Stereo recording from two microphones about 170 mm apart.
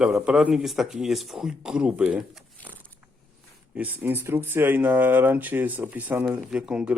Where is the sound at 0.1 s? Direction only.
10° right (ahead or behind).